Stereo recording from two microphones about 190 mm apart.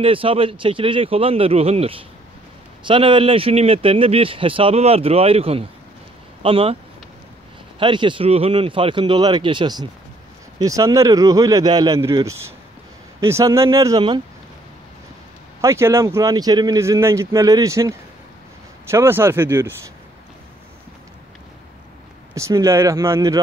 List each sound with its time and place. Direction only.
0.0 s speech: 30° right (ahead or behind)
7.8 s a man's voice: 25° right (ahead or behind)
15.6 s a man's voice: 15° right (ahead or behind)
22.3 s a man's voice: 15° right (ahead or behind)